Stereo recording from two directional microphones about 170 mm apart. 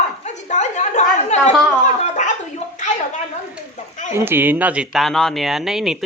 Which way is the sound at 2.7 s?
45° left (ahead or behind).